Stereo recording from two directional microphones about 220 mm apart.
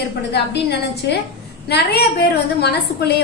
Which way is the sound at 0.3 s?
50° left (ahead or behind).